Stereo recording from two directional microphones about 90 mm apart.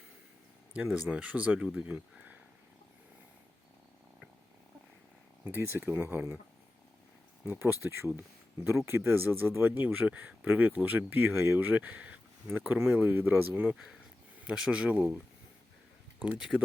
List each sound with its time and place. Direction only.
0.7 s speech: 15° right (ahead or behind)
5.5 s speech: 25° right (ahead or behind)
7.6 s speech: 25° right (ahead or behind)